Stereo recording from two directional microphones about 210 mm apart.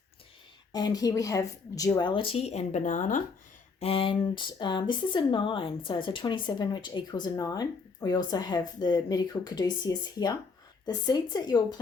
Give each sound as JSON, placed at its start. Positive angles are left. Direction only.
{"t": 0.7, "sound": "speech", "side_deg": 20}